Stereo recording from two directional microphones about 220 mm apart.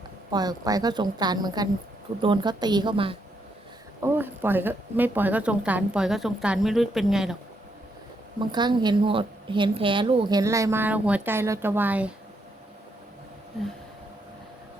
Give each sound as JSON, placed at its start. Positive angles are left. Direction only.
{"t": 0.3, "sound": "a woman's voice", "side_deg": -15}
{"t": 4.0, "sound": "speech", "side_deg": -10}
{"t": 8.4, "sound": "a woman's voice", "side_deg": -20}